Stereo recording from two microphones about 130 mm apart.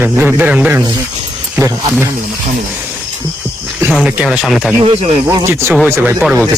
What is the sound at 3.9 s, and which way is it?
Speech, 10° right (ahead or behind).